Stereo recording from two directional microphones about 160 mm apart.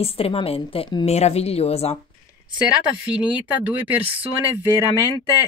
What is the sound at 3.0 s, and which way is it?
Speech, 5° right (ahead or behind).